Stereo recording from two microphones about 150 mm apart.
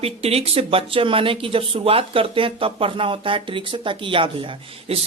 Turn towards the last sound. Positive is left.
turn(degrees=-40)  # may be behind; listen again after turning